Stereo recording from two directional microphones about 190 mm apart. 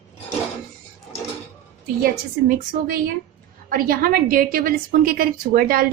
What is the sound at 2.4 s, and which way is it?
Speech, 55° right (ahead or behind).